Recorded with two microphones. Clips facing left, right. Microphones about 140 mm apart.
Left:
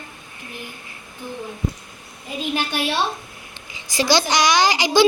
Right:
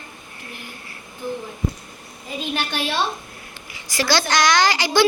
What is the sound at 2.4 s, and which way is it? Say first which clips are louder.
A child's voice: left 2 dB; 10° left (ahead or behind).